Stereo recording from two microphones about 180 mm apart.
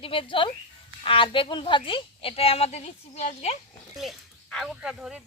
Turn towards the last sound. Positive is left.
turn(degrees=-5)  # may be behind; listen again after turning